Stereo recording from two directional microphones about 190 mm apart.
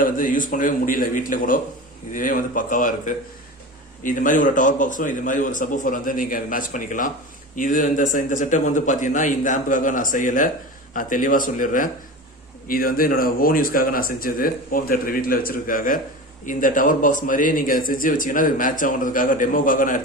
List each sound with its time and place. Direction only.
0.0 s a man's voice: 45° left (ahead or behind)